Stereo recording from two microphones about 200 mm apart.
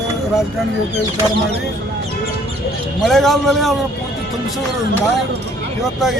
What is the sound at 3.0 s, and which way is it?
Speech, centre (ahead or behind).